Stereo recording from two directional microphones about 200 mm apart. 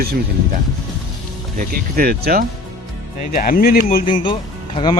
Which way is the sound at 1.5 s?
45° right (ahead or behind).